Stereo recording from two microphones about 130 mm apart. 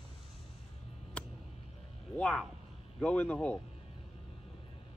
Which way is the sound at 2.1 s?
10° left (ahead or behind).